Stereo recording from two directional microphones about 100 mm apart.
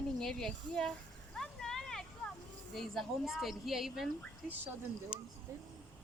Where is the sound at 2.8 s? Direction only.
Centre (ahead or behind).